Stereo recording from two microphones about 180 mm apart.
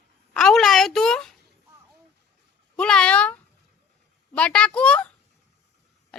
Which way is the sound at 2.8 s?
5° left (ahead or behind).